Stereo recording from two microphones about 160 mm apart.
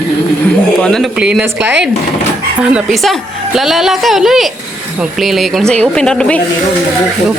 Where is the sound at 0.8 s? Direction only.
5° left (ahead or behind).